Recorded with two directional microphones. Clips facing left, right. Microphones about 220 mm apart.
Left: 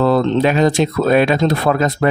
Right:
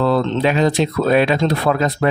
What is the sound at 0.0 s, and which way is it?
Speech, 45° left (ahead or behind).